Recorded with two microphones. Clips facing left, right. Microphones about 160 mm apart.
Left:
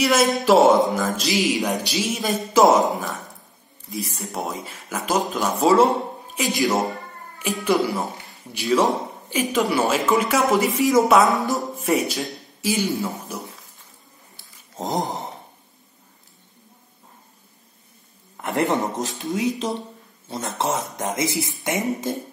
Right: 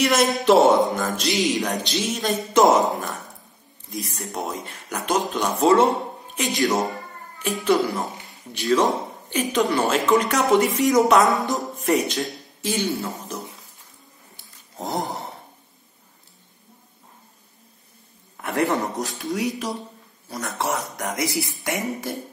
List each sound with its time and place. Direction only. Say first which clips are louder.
0.0 s speech: left 1 dB; centre (ahead or behind)
14.8 s a sound: left 2 dB; 20° left (ahead or behind)
18.4 s speech: left 1 dB; 20° left (ahead or behind)